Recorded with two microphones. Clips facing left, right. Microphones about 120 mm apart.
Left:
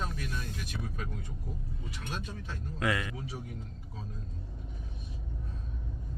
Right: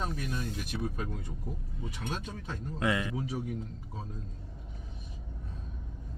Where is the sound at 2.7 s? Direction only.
25° right (ahead or behind).